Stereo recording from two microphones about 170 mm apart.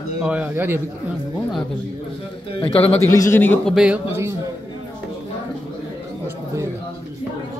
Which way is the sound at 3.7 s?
5° right (ahead or behind).